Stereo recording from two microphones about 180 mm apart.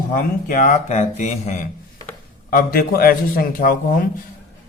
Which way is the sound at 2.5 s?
55° left (ahead or behind).